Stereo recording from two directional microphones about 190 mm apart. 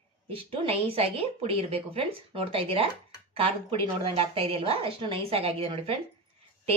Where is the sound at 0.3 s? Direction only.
30° right (ahead or behind).